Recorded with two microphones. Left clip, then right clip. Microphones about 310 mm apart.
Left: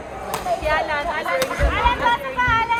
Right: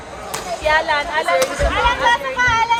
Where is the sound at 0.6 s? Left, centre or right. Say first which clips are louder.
Right 8 dB; right.